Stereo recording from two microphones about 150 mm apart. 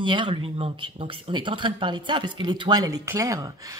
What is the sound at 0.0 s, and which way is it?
Speech, 35° right (ahead or behind).